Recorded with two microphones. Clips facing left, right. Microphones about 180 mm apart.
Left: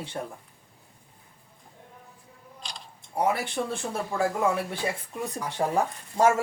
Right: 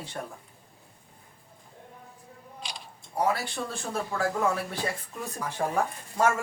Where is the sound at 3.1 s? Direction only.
20° left (ahead or behind).